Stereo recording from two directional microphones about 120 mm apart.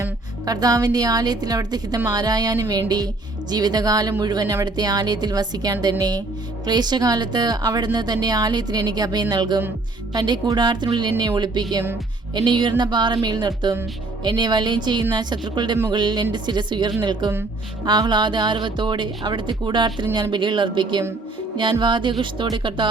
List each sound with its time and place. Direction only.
0.4 s speech: 30° right (ahead or behind)